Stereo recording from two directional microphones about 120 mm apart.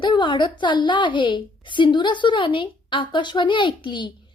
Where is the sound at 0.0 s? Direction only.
40° left (ahead or behind).